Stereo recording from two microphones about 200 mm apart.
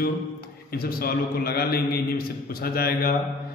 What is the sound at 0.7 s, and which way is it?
A man's voice, 50° left (ahead or behind).